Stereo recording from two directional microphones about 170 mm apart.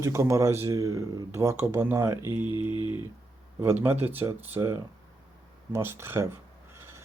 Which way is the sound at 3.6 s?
10° right (ahead or behind).